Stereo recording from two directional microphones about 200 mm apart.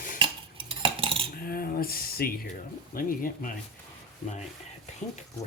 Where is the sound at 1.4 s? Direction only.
45° left (ahead or behind).